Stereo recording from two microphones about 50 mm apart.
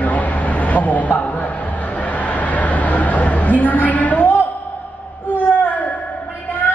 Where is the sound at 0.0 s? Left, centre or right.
Left.